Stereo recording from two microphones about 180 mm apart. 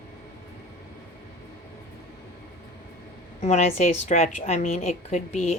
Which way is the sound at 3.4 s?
40° left (ahead or behind).